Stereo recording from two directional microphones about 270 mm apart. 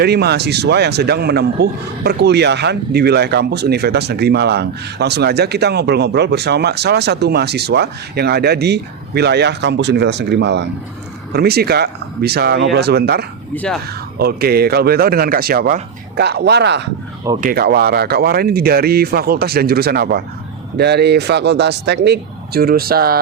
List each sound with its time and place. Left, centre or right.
0.0 s speech: right